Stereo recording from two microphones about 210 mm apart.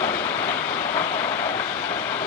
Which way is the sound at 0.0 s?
10° left (ahead or behind).